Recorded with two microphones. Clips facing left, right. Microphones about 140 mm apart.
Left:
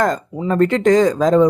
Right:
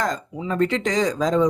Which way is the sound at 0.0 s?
50° left (ahead or behind).